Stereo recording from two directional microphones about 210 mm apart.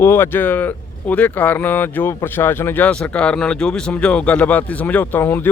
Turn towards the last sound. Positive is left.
turn(degrees=10)  # may be behind; listen again after turning